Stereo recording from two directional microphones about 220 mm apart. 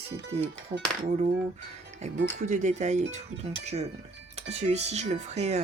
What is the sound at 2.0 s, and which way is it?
Speech, 30° right (ahead or behind).